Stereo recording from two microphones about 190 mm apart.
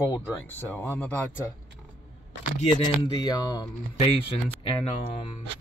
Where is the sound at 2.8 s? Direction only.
20° left (ahead or behind).